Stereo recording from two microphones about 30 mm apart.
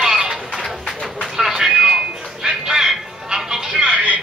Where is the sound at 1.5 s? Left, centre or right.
Centre.